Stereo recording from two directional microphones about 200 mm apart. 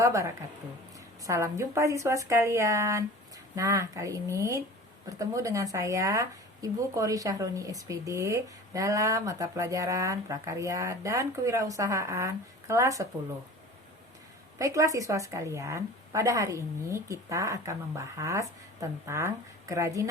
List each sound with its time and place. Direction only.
0.0 s speech: 15° right (ahead or behind)
14.6 s speech: 15° right (ahead or behind)